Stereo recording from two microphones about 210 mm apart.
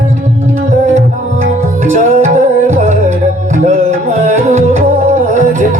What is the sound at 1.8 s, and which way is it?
Music, 35° right (ahead or behind).